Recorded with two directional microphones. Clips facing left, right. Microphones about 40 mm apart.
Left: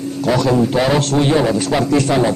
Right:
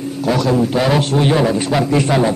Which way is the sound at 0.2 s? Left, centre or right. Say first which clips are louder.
Left 1 dB; centre.